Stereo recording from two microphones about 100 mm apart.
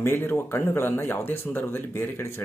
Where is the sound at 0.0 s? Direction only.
20° left (ahead or behind).